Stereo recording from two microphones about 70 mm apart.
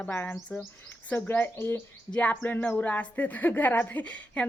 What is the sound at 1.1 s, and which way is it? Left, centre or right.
Speech, left.